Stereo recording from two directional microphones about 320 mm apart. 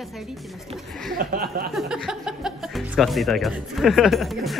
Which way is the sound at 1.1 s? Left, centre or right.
Right.